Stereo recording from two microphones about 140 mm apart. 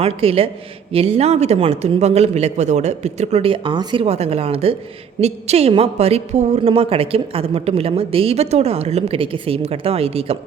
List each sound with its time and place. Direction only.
0.0 s a man's voice: 45° right (ahead or behind)